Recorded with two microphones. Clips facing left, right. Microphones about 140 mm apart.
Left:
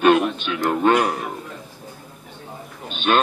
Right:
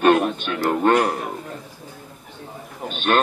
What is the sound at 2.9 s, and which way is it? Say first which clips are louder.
Sheep: even; 45° right (ahead or behind).